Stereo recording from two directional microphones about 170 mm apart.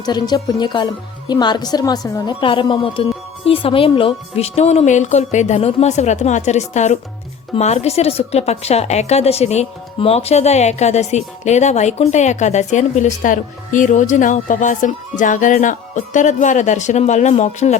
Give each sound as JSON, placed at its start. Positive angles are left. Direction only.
{"t": 0.0, "sound": "a woman's voice", "side_deg": 25}